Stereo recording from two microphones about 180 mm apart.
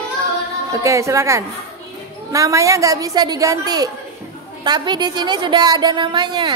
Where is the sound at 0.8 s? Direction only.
15° right (ahead or behind).